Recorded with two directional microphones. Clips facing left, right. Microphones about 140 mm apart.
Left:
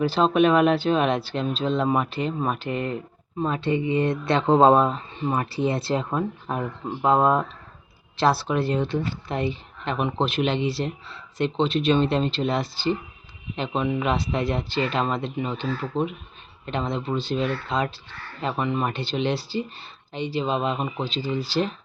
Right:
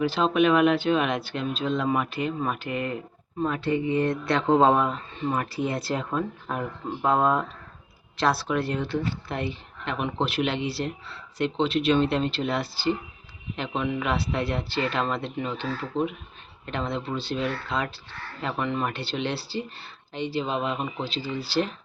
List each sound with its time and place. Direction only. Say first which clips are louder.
0.0 s speech: left 3 dB; 35° left (ahead or behind); by 15.6 s 15° left (ahead or behind)
16.6 s speech: left 3 dB; 20° left (ahead or behind)